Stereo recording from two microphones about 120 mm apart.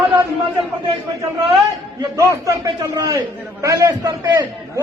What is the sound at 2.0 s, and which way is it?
A man's voice, 25° right (ahead or behind).